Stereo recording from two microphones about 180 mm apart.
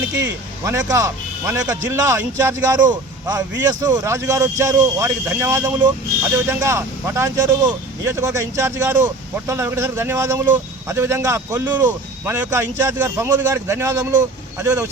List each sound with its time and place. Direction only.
0.1 s speech: 15° right (ahead or behind)